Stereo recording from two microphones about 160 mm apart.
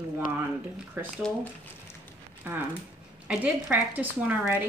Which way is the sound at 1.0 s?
15° right (ahead or behind).